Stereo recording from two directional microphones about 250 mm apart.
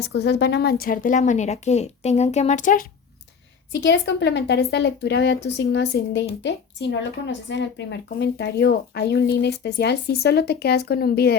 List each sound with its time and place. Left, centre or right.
0.1 s speech: left
3.7 s a woman's voice: left